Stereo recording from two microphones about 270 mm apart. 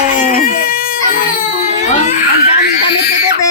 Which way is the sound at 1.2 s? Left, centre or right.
Left.